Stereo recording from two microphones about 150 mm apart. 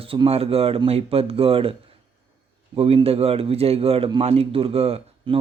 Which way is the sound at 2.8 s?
40° right (ahead or behind).